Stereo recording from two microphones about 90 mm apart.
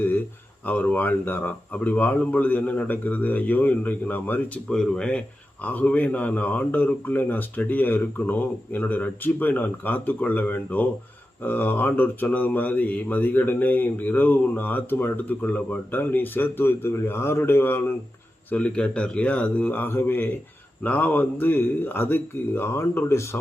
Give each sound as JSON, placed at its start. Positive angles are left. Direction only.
{"t": 0.6, "sound": "speech", "side_deg": 20}
{"t": 4.7, "sound": "a man's voice", "side_deg": 10}
{"t": 18.5, "sound": "a man's voice", "side_deg": 15}